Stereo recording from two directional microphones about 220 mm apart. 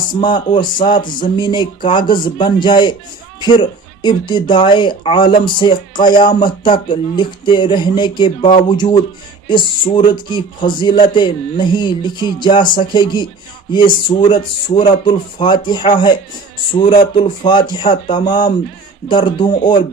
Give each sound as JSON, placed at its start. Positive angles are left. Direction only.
{"t": 0.8, "sound": "speech", "side_deg": 20}